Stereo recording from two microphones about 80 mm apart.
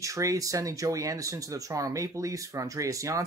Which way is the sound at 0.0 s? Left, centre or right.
Right.